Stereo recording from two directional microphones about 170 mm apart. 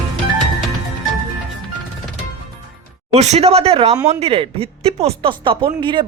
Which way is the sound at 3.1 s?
40° right (ahead or behind).